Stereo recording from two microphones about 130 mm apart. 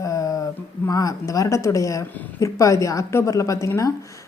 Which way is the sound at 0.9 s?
25° left (ahead or behind).